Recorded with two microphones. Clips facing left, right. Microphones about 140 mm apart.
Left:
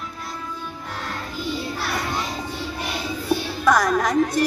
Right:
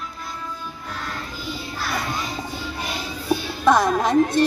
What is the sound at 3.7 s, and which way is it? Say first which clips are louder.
Music: right 2 dB; 25° right (ahead or behind).